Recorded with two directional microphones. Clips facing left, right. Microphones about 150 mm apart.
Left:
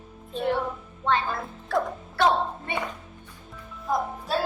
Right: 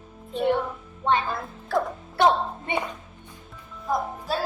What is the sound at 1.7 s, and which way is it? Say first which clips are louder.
Speech: right 1 dB; centre (ahead or behind).